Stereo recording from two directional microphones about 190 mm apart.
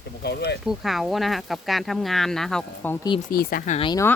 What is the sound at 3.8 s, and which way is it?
Speech, 25° left (ahead or behind).